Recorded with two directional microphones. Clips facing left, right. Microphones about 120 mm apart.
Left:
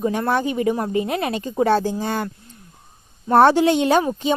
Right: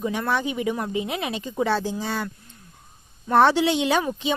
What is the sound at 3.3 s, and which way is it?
Speech, 45° left (ahead or behind).